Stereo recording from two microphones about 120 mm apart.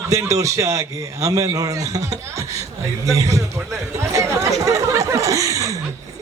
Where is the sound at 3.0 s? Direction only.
25° right (ahead or behind).